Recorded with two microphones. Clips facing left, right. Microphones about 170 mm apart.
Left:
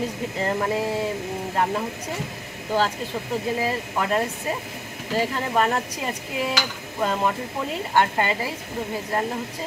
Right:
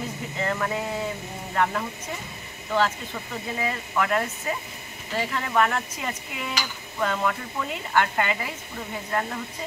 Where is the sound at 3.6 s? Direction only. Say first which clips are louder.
Left 2 dB; 30° left (ahead or behind).